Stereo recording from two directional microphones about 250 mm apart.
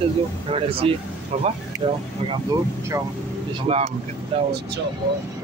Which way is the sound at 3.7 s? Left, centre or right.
Right.